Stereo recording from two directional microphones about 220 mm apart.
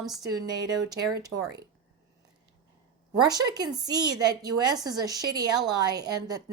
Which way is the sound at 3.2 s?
15° right (ahead or behind).